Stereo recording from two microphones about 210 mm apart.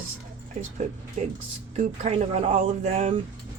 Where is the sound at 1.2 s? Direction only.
35° right (ahead or behind).